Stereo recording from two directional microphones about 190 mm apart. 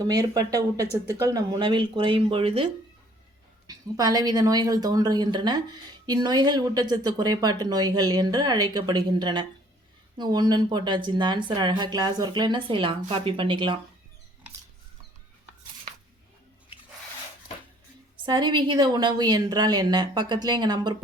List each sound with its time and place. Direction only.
0.0 s speech: 20° right (ahead or behind)
3.7 s speech: 20° right (ahead or behind)
18.3 s speech: 25° right (ahead or behind)